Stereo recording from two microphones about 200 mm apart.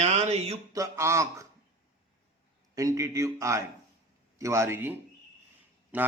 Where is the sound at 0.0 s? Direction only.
35° right (ahead or behind).